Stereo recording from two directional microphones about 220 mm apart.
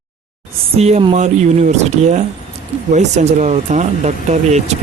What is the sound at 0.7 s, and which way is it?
Speech, 30° right (ahead or behind).